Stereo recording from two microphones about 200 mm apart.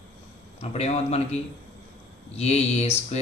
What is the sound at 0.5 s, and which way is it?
Speech, 30° left (ahead or behind).